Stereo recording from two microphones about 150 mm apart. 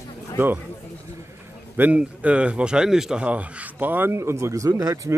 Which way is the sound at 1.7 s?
10° right (ahead or behind).